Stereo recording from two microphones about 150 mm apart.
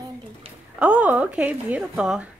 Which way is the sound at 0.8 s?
10° right (ahead or behind).